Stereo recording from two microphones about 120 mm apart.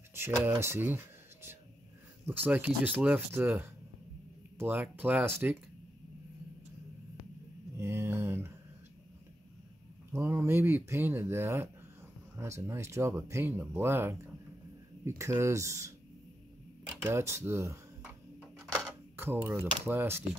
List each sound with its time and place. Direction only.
0.1 s speech: 20° right (ahead or behind)
7.7 s mantra: 20° right (ahead or behind)
10.1 s speech: 20° right (ahead or behind)
17.0 s speech: 20° right (ahead or behind)
19.1 s speech: 20° right (ahead or behind)